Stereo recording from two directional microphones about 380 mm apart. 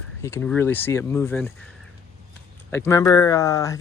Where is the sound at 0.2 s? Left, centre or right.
Centre.